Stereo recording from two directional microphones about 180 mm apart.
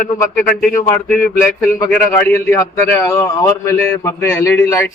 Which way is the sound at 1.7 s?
15° left (ahead or behind).